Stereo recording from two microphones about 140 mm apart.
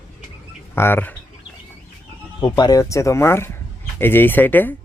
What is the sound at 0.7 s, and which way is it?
Speech, 15° left (ahead or behind).